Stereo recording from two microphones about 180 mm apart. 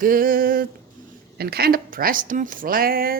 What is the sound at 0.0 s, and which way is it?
A woman's voice, 50° right (ahead or behind).